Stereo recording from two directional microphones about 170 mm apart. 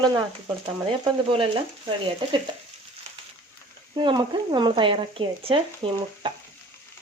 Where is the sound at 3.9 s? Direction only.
25° right (ahead or behind).